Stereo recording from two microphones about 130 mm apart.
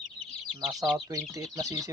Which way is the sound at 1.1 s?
25° right (ahead or behind).